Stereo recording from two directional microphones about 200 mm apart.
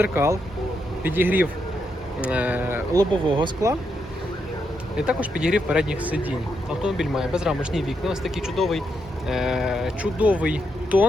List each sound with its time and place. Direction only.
0.0 s speech: 10° right (ahead or behind)
4.9 s speech: 5° right (ahead or behind)